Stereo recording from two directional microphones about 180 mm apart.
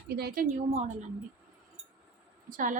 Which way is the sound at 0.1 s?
60° right (ahead or behind).